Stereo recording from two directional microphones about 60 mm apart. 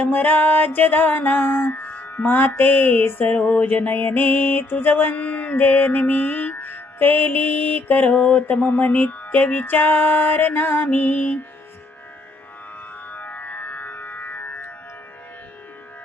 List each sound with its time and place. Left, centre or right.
0.1 s music: left
5.1 s music: left
13.1 s music: left